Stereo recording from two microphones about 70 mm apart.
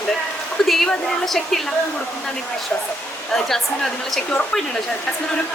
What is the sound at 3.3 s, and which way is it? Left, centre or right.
Speech, centre.